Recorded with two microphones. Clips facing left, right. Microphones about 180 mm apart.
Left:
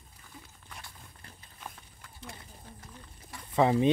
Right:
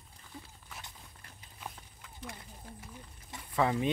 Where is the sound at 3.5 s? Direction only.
25° left (ahead or behind).